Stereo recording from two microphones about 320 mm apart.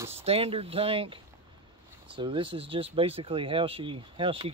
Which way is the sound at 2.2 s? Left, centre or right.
Centre.